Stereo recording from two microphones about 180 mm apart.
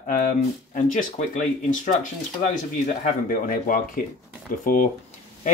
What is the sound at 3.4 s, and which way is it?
Speech, 50° left (ahead or behind).